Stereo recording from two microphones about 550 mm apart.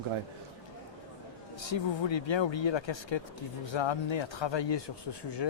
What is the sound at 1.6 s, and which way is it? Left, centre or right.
Speech, left.